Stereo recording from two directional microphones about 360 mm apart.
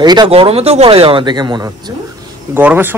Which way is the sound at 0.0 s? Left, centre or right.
Centre.